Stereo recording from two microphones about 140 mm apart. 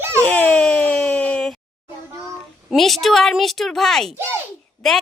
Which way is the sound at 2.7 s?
Centre (ahead or behind).